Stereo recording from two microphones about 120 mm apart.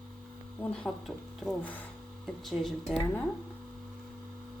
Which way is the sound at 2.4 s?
Centre (ahead or behind).